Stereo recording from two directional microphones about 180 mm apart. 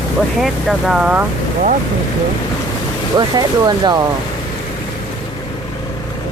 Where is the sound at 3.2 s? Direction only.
25° right (ahead or behind).